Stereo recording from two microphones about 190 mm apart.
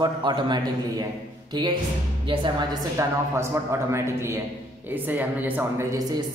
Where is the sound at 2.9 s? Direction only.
15° right (ahead or behind).